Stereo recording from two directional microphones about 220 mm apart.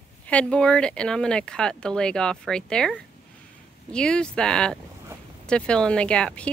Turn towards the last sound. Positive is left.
turn(degrees=5)  # may be behind; listen again after turning